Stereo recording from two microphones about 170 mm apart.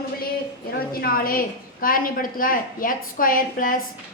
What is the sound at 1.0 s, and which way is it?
A woman's voice, 60° left (ahead or behind).